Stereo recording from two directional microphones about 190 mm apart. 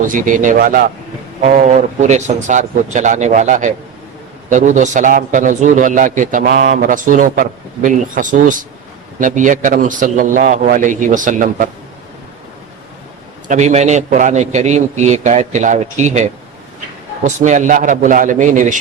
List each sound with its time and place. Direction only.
0.1 s a man's voice: 45° right (ahead or behind)
13.5 s a man's voice: 35° right (ahead or behind)